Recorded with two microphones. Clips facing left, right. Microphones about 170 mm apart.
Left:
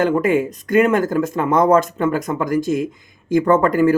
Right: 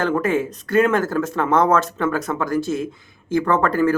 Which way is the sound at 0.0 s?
15° left (ahead or behind).